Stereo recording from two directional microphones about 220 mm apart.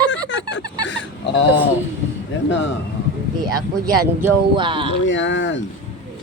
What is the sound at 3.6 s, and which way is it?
Speech, 15° right (ahead or behind).